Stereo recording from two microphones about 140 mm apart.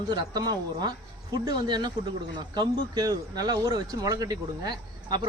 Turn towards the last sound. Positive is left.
turn(degrees=-30)  # may be behind; listen again after turning